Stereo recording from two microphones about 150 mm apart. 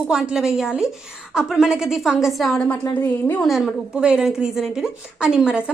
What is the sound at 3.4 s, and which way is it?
A woman's voice, centre (ahead or behind).